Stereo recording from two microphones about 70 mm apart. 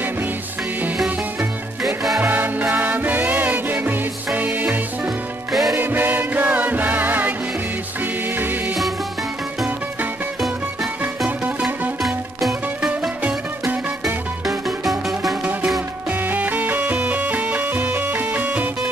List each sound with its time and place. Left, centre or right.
2.1 s music: right
5.5 s music: centre
5.8 s music: right
12.4 s music: centre
14.9 s music: centre
16.1 s music: right